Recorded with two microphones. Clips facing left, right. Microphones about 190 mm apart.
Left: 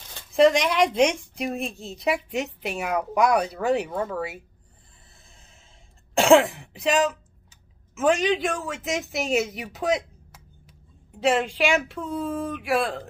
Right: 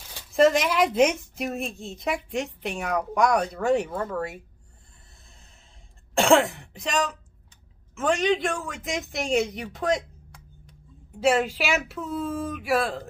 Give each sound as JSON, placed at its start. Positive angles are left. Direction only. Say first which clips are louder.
{"t": 0.1, "sound": "speech", "louder": "left 1 dB", "side_deg": 0}
{"t": 6.1, "sound": "speech", "louder": "left 3 dB", "side_deg": 0}